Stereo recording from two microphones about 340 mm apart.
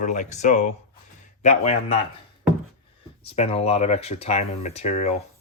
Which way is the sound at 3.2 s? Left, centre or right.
Centre.